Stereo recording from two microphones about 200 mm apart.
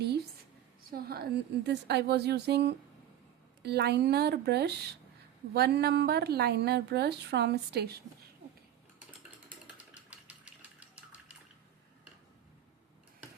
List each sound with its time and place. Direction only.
0.9 s a woman's voice: 50° right (ahead or behind)
10.1 s engine: 5° right (ahead or behind)